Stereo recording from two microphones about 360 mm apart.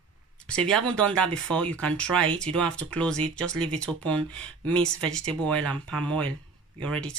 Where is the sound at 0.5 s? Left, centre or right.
Centre.